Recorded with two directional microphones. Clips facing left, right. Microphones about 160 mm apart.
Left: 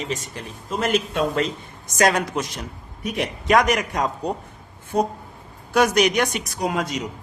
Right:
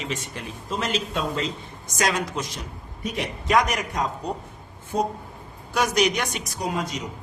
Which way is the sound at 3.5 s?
70° left (ahead or behind).